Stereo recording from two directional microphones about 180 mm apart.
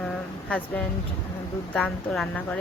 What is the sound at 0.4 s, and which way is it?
A woman's voice, 5° left (ahead or behind).